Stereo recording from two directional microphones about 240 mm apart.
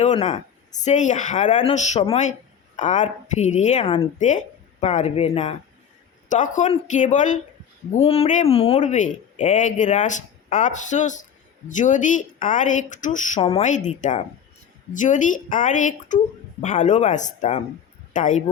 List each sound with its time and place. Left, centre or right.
0.0 s a woman's voice: left